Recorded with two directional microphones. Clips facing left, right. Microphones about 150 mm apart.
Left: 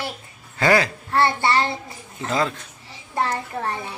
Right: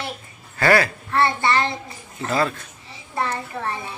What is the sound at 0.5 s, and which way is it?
Speech, 20° left (ahead or behind).